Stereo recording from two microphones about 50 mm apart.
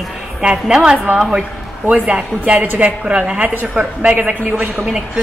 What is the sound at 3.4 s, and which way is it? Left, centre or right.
A man's voice, right.